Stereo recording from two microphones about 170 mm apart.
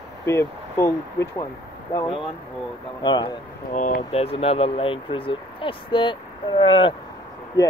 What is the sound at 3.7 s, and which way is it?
Speech, 40° left (ahead or behind).